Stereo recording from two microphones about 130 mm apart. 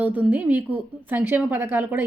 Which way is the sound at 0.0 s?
15° right (ahead or behind).